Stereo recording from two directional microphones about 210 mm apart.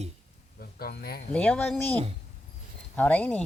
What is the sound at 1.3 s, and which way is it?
Speech, 5° left (ahead or behind).